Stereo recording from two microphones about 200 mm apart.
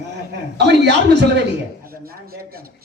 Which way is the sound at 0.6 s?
60° right (ahead or behind).